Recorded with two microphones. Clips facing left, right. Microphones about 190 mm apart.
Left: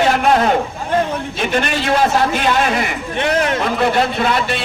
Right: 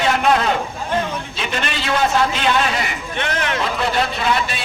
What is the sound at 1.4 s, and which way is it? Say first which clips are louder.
A man's voice: left 8 dB; 50° left (ahead or behind).